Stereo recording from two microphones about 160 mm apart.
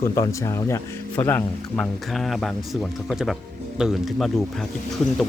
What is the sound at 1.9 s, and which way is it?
Speech, centre (ahead or behind).